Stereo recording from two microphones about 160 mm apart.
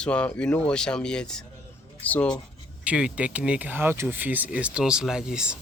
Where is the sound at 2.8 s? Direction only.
5° right (ahead or behind).